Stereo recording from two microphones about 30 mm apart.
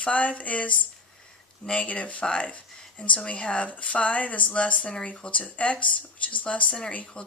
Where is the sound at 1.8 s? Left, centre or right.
Left.